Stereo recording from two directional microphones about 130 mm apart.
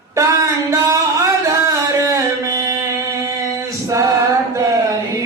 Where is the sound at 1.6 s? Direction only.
25° right (ahead or behind).